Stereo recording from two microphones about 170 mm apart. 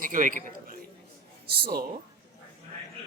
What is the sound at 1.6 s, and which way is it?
Speech, 60° right (ahead or behind).